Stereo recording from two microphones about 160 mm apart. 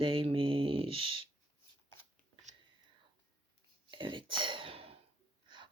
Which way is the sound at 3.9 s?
30° right (ahead or behind).